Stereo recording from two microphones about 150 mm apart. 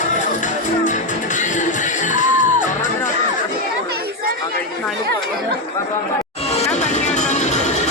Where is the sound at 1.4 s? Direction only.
55° left (ahead or behind).